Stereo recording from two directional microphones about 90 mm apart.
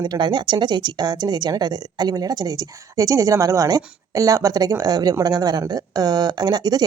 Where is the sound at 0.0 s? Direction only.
55° right (ahead or behind).